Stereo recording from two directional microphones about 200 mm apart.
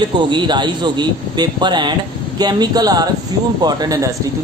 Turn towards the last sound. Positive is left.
turn(degrees=-20)  # may be behind; listen again after turning